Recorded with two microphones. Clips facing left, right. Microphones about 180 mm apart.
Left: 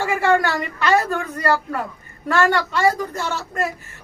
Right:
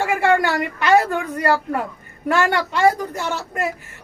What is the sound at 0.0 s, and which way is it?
Speech, 15° right (ahead or behind).